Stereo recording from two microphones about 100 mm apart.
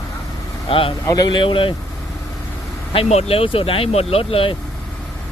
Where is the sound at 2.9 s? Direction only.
70° left (ahead or behind).